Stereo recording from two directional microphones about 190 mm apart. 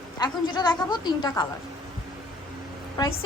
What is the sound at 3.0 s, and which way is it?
Speech, 20° left (ahead or behind).